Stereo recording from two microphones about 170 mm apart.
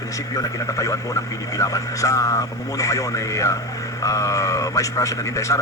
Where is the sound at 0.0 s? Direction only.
20° left (ahead or behind).